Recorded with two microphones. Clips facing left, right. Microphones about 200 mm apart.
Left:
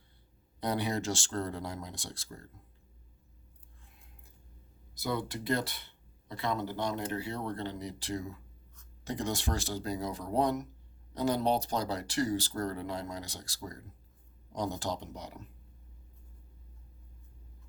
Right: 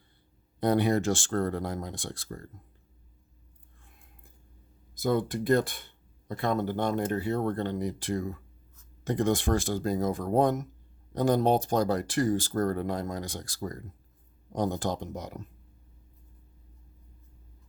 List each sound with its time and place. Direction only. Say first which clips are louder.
0.6 s speech: right 8 dB; 55° right (ahead or behind)
4.9 s speech: right 7 dB; 50° right (ahead or behind)